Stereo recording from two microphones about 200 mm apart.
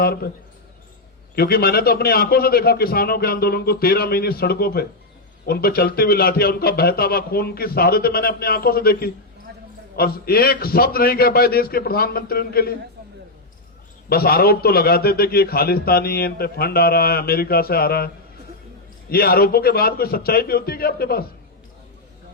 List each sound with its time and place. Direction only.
0.0 s a man's voice: 50° left (ahead or behind)
1.4 s a man's voice: 50° left (ahead or behind)
9.5 s a sound: 55° right (ahead or behind)
9.9 s a man's voice: 50° left (ahead or behind)
14.1 s a man's voice: 50° left (ahead or behind)
19.1 s a man's voice: 50° left (ahead or behind)